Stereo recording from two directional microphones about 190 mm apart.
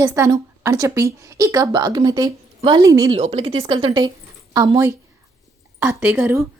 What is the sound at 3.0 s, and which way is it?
A woman's voice, 30° right (ahead or behind).